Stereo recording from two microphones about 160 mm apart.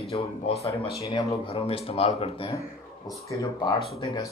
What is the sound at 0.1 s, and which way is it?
Speech, 40° left (ahead or behind).